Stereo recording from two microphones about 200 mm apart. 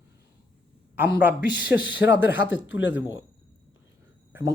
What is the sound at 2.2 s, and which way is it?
Speech, 10° right (ahead or behind).